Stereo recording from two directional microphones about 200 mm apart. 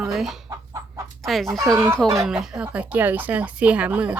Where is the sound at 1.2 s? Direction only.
Centre (ahead or behind).